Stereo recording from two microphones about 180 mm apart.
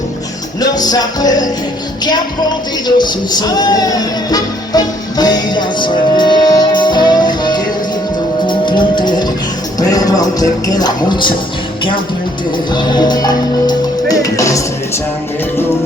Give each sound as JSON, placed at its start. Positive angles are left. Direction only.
{"t": 0.6, "sound": "music", "side_deg": 20}
{"t": 2.8, "sound": "music", "side_deg": 20}
{"t": 12.7, "sound": "music", "side_deg": 25}